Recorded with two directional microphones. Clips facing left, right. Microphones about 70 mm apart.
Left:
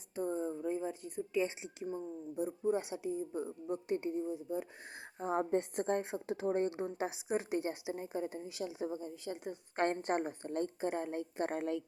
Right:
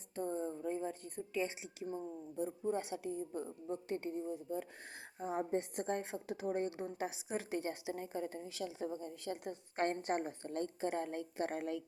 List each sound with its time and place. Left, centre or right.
0.2 s a sound: centre
1.4 s a woman's voice: left
5.2 s a woman's voice: left
6.7 s a woman's voice: left
9.2 s a woman's voice: centre
9.7 s a woman's voice: left